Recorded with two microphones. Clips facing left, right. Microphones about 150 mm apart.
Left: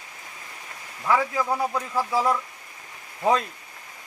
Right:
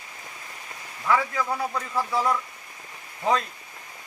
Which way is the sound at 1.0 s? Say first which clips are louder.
Left 1 dB; 15° left (ahead or behind).